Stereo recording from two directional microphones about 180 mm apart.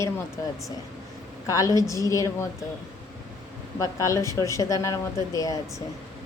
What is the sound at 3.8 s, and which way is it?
Speech, 15° left (ahead or behind).